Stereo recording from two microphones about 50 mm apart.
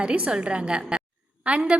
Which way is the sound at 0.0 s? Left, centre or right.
Right.